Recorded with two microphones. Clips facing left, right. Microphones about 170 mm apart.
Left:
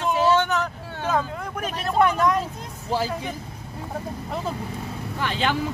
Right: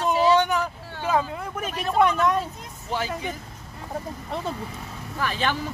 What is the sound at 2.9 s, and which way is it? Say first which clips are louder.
Speech: left 3 dB; 40° left (ahead or behind).